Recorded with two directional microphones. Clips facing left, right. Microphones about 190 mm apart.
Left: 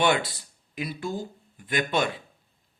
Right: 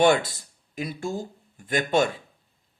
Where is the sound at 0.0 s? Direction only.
45° right (ahead or behind).